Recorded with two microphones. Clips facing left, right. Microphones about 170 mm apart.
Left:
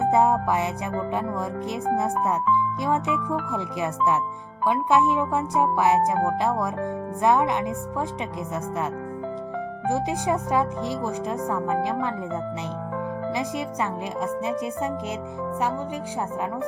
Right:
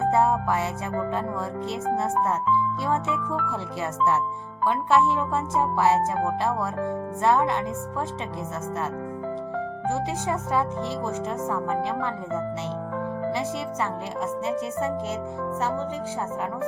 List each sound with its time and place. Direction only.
0.0 s music: 15° left (ahead or behind)
1.7 s speech: 15° left (ahead or behind)
9.9 s speech: 15° left (ahead or behind)
14.2 s speech: 15° left (ahead or behind)